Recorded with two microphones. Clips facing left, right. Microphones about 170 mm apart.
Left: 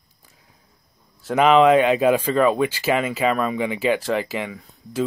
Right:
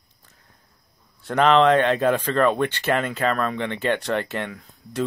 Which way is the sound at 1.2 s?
5° left (ahead or behind).